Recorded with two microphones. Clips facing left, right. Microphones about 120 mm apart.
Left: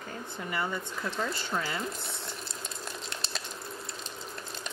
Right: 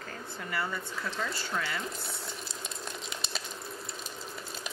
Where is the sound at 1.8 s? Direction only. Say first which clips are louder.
Left 2 dB; centre (ahead or behind).